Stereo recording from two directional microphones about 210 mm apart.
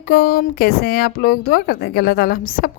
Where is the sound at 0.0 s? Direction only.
45° left (ahead or behind).